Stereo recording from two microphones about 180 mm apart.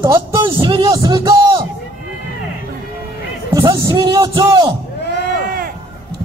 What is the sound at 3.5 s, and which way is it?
A man's voice, 20° right (ahead or behind).